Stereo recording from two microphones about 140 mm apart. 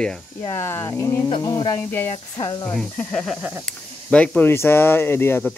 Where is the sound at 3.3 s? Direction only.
10° right (ahead or behind).